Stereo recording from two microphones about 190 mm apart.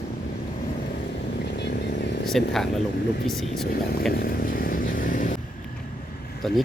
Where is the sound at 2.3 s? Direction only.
Centre (ahead or behind).